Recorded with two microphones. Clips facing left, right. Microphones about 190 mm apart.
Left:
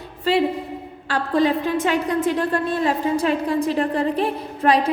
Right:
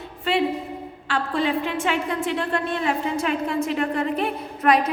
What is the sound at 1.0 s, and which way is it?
A woman's voice, 40° left (ahead or behind).